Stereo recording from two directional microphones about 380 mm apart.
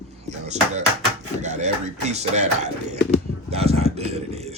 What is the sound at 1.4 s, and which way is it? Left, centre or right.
Speech, centre.